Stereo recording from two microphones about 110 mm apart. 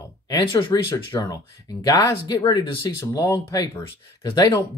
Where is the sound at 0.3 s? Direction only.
45° left (ahead or behind).